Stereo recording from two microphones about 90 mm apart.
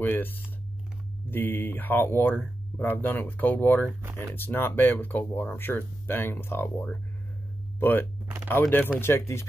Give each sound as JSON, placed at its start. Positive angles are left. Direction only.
{"t": 0.0, "sound": "speech", "side_deg": 25}